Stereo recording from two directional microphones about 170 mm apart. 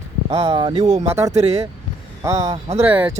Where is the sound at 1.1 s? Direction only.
15° right (ahead or behind).